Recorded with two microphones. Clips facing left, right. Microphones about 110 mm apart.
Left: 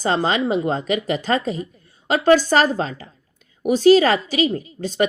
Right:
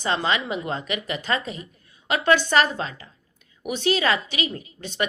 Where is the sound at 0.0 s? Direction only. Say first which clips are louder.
Left 5 dB; 40° left (ahead or behind).